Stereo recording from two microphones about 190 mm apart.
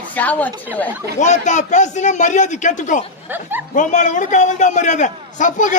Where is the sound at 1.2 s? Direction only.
40° left (ahead or behind).